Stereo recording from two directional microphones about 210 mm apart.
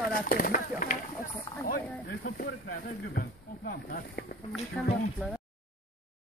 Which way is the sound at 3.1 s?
45° left (ahead or behind).